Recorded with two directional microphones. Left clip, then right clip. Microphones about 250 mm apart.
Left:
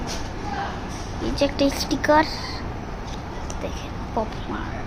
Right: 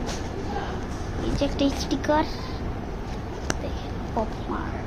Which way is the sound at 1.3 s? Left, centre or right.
Left.